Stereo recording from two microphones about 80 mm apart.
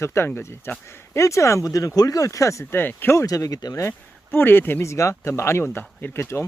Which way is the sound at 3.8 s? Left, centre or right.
Left.